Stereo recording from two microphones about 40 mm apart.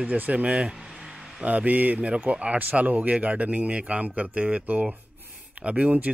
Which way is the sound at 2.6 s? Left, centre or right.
Right.